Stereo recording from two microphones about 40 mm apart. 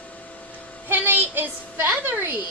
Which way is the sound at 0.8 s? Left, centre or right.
Right.